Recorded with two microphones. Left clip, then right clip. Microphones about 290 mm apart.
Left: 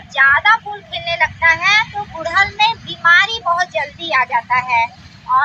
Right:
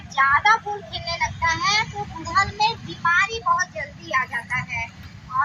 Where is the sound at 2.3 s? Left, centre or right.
Centre.